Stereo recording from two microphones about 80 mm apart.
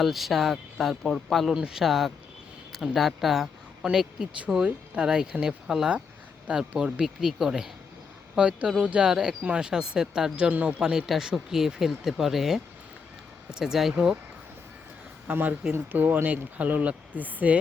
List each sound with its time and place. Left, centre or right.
0.0 s speech: centre
10.5 s speech: centre
10.8 s speech: centre
15.3 s speech: right